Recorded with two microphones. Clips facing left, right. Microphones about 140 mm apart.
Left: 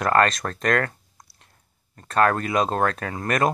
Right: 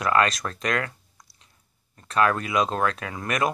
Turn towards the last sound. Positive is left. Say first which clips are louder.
# left 3 dB
turn(degrees=45)  # may be behind; listen again after turning